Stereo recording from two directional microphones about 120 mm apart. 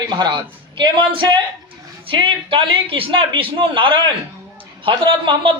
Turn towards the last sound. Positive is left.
turn(degrees=-45)  # may be behind; listen again after turning